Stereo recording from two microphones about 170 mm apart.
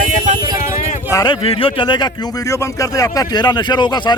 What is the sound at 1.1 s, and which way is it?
Speech, 20° left (ahead or behind).